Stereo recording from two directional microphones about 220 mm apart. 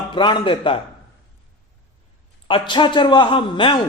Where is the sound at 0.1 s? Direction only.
20° left (ahead or behind).